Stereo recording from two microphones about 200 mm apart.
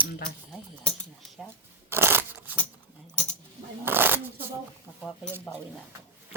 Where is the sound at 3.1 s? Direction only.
5° left (ahead or behind).